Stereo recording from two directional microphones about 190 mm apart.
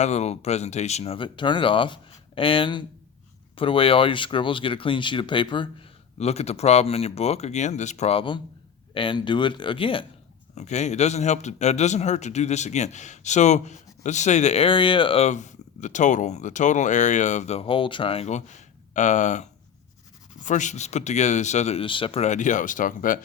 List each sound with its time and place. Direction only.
0.0 s a man's voice: 35° left (ahead or behind)